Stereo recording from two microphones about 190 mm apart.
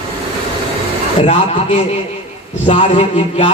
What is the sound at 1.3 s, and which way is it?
Speech, 30° left (ahead or behind).